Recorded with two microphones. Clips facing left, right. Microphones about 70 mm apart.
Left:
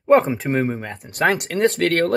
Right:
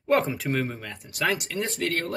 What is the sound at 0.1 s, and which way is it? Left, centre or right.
Speech, left.